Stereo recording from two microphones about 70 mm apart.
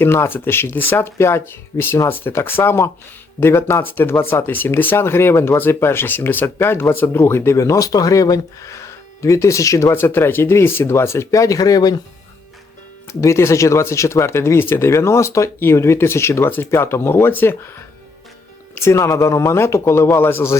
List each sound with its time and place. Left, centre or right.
0.0 s speech: left
9.9 s speech: left
11.3 s speech: left
13.1 s speech: left
18.7 s speech: left